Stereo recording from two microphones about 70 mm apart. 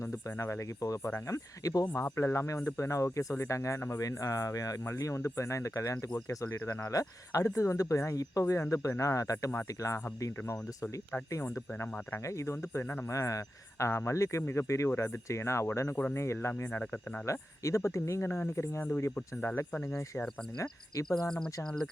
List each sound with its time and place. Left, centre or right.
0.0 s speech: left
1.3 s cricket: left
2.1 s speech: left
11.5 s speech: left
13.1 s speech: left
17.2 s speech: left
18.8 s speech: left
20.6 s cricket: left
21.2 s speech: centre